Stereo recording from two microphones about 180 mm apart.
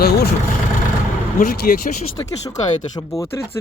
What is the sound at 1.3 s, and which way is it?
Speech, 50° left (ahead or behind).